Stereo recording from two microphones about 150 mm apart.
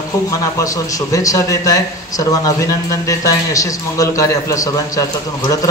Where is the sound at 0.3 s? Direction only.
20° left (ahead or behind).